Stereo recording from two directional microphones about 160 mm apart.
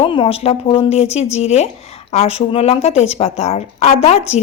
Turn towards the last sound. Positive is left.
turn(degrees=40)  # may be behind; listen again after turning